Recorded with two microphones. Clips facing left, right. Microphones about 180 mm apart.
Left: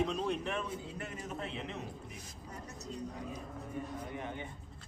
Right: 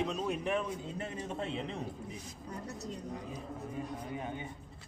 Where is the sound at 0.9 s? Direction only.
30° right (ahead or behind).